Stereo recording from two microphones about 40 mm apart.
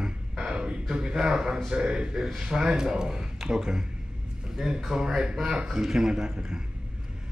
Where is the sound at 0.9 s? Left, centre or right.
Right.